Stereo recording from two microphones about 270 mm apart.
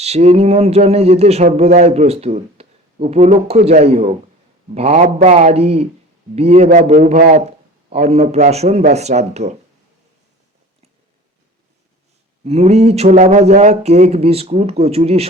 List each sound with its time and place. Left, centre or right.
0.0 s speech: right
12.5 s speech: right